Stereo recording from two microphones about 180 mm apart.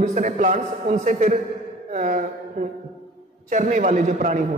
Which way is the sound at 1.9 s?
45° right (ahead or behind).